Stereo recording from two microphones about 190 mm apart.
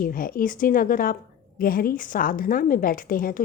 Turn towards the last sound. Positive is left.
turn(degrees=45)  # may be behind; listen again after turning